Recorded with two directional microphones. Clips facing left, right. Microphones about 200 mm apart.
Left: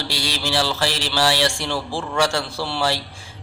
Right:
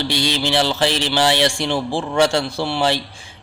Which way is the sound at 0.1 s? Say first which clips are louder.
Right 4 dB; 20° right (ahead or behind).